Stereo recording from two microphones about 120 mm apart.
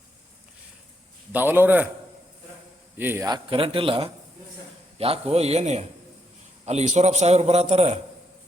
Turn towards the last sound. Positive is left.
turn(degrees=-60)  # may be behind; listen again after turning